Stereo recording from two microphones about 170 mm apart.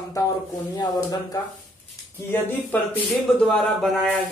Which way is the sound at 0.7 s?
25° left (ahead or behind).